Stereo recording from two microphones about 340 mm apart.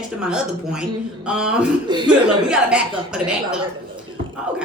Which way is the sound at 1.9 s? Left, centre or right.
Centre.